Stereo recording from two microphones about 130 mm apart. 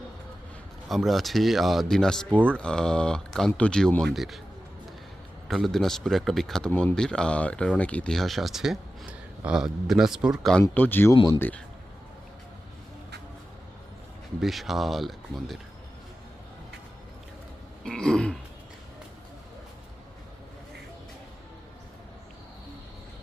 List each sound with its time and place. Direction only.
0.9 s speech: centre (ahead or behind)
5.5 s speech: centre (ahead or behind)
10.6 s speech: 15° left (ahead or behind)
14.4 s speech: centre (ahead or behind)
17.8 s speech: 5° left (ahead or behind)